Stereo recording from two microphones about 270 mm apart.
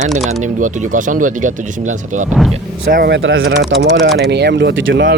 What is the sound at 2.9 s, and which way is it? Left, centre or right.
Speech, right.